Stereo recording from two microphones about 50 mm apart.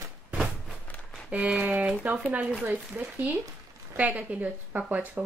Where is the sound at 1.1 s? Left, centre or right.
Right.